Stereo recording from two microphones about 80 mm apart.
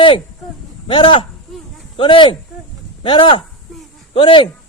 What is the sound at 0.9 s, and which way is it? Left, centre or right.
Speech, left.